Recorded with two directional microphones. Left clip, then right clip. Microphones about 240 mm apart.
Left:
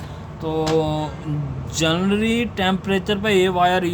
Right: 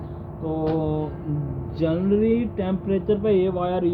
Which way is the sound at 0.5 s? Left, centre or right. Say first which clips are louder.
Left 5 dB; left.